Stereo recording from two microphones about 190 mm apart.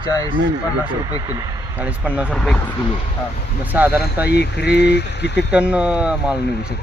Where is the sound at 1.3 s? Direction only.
10° right (ahead or behind); by 2.7 s 5° left (ahead or behind).